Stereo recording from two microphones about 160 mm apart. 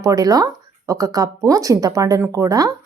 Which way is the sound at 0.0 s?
20° right (ahead or behind).